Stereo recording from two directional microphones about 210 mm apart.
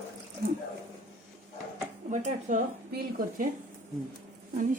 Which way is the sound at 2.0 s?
35° right (ahead or behind).